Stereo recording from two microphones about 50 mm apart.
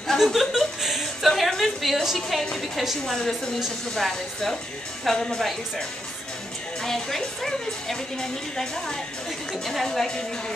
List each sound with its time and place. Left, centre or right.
0.2 s a woman's voice: centre